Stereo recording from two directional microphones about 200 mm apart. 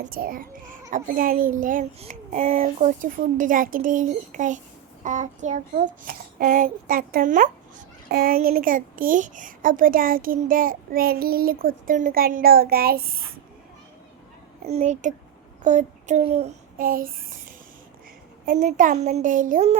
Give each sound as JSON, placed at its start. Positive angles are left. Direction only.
{"t": 0.0, "sound": "a child's voice", "side_deg": -45}
{"t": 14.7, "sound": "a child's voice", "side_deg": -35}
{"t": 18.4, "sound": "a child's voice", "side_deg": -40}